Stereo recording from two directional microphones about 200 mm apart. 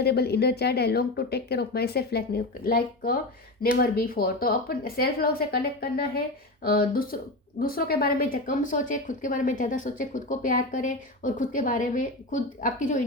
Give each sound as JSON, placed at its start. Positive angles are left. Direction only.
{"t": 0.0, "sound": "a woman's voice", "side_deg": 55}